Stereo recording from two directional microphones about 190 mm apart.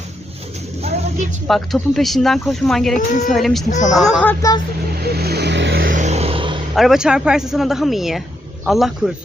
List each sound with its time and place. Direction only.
0.8 s vehicle: 35° right (ahead or behind)
1.5 s speech: centre (ahead or behind)
3.7 s speech: 40° left (ahead or behind)
3.9 s speech: centre (ahead or behind)
5.0 s vehicle: 55° right (ahead or behind)
5.8 s a sound: 40° right (ahead or behind)
6.7 s speech: centre (ahead or behind)